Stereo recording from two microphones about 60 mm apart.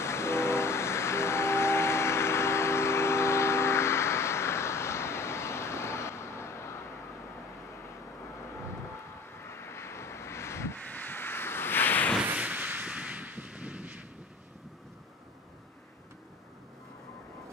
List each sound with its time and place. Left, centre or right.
0.0 s train: left
9.4 s vehicle: left
10.8 s a sound: left
12.4 s artillery fire: right